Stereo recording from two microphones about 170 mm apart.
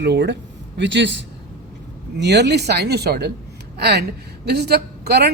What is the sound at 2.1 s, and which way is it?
A woman's voice, 85° right.